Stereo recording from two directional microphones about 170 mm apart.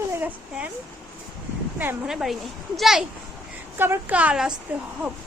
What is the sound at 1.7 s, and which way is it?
A child's voice, 10° right (ahead or behind).